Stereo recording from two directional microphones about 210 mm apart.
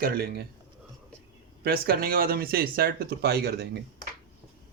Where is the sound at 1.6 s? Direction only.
45° right (ahead or behind).